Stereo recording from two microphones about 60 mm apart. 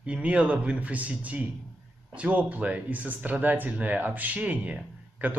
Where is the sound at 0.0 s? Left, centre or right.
Right.